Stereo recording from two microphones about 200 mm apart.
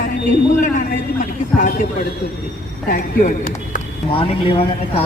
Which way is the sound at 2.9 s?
40° left (ahead or behind).